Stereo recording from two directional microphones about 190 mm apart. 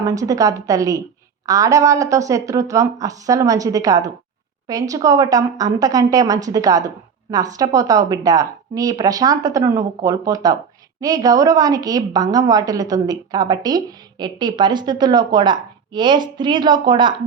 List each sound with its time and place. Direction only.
0.0 s a woman's voice: 15° right (ahead or behind)